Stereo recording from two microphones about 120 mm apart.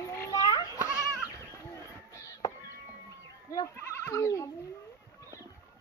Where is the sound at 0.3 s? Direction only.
35° left (ahead or behind).